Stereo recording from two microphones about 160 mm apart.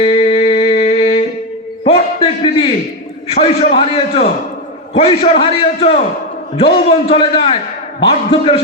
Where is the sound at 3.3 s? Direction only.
40° left (ahead or behind).